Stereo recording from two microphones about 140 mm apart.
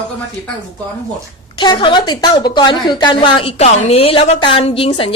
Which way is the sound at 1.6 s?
35° left (ahead or behind).